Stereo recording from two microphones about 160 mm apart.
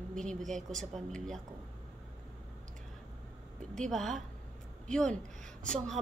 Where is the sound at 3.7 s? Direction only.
5° left (ahead or behind).